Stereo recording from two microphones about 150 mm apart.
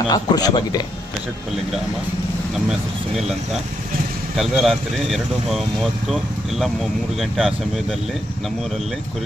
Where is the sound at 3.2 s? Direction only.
Centre (ahead or behind).